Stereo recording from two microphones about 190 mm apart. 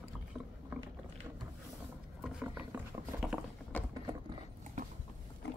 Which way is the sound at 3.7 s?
10° left (ahead or behind).